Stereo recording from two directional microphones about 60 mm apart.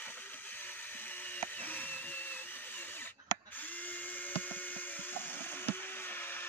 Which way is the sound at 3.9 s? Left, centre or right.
Left.